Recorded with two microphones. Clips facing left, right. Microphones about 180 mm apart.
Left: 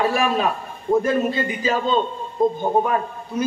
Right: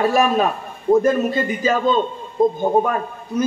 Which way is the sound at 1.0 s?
45° right (ahead or behind).